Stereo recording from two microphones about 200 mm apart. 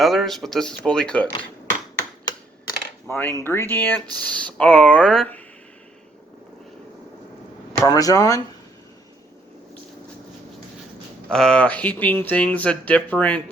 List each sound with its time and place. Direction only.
0.0 s speech: centre (ahead or behind)
2.2 s computer keyboard: 15° left (ahead or behind)
4.1 s speech: 5° left (ahead or behind)
7.9 s speech: 15° left (ahead or behind)
11.3 s speech: 5° left (ahead or behind)